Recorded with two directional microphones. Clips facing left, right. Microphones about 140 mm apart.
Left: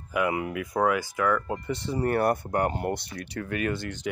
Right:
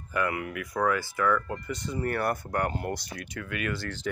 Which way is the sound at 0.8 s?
10° left (ahead or behind).